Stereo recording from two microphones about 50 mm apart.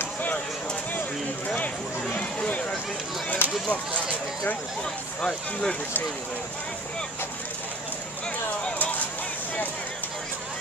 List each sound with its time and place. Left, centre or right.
2.1 s a sound: left
3.4 s speech: left
5.2 s speech: centre